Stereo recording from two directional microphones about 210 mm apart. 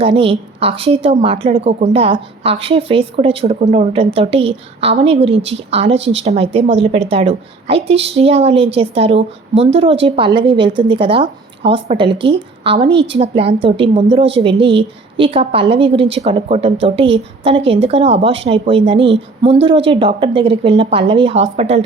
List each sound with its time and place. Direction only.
0.0 s a woman's voice: 25° right (ahead or behind)